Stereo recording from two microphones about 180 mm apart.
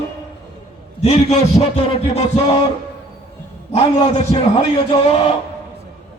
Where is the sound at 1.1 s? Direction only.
35° left (ahead or behind).